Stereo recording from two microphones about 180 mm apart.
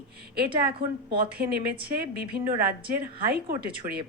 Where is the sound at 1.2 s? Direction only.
60° right (ahead or behind).